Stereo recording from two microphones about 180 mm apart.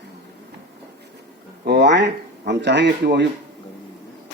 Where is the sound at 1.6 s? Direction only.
70° right (ahead or behind).